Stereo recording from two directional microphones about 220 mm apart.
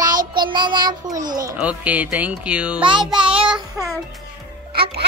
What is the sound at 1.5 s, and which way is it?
Speech, 5° right (ahead or behind).